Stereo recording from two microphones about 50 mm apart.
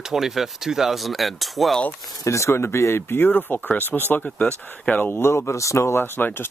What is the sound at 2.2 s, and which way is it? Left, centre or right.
Speech, left.